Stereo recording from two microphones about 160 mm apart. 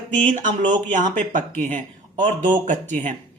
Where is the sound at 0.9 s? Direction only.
50° right (ahead or behind).